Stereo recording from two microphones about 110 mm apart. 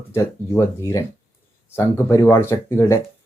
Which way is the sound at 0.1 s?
25° left (ahead or behind).